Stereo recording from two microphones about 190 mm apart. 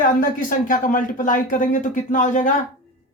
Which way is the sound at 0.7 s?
45° left (ahead or behind).